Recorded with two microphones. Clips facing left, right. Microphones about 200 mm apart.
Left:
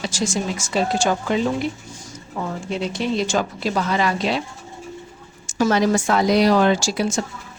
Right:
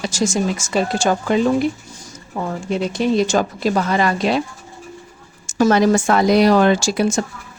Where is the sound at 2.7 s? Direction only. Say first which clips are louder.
Right 6 dB; 45° right (ahead or behind).